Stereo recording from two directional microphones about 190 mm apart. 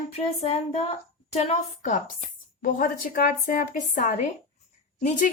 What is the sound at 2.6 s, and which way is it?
A woman's voice, 50° left (ahead or behind).